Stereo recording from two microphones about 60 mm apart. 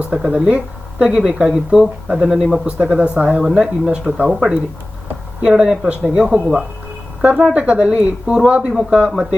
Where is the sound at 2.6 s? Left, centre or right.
Right.